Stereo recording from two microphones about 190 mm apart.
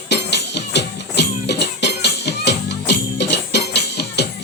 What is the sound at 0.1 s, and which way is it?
Music, 65° left (ahead or behind).